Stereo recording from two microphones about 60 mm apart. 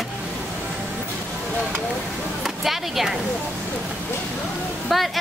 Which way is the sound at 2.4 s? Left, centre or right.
Centre.